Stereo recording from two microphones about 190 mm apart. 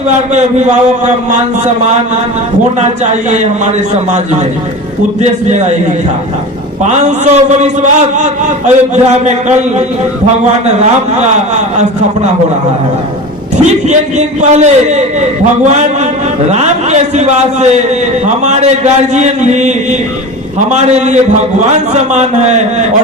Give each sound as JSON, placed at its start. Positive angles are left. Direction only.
{"t": 0.1, "sound": "a man's voice", "side_deg": -35}
{"t": 5.5, "sound": "a man's voice", "side_deg": -35}
{"t": 6.8, "sound": "a man's voice", "side_deg": -40}
{"t": 13.8, "sound": "a man's voice", "side_deg": -40}